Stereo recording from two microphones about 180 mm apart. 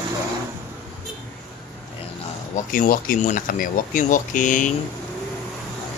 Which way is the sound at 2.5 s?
50° left (ahead or behind).